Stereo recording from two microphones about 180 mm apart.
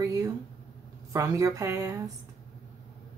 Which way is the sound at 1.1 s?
20° right (ahead or behind).